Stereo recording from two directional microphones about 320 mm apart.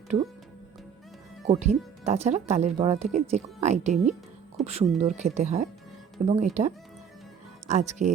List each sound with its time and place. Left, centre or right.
1.5 s speech: right